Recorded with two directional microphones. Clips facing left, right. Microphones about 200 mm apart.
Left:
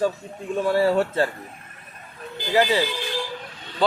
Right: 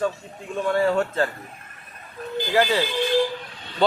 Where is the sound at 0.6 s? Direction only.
35° left (ahead or behind).